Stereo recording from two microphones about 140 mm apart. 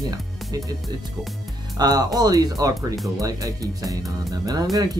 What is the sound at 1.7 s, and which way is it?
Speech, 30° right (ahead or behind).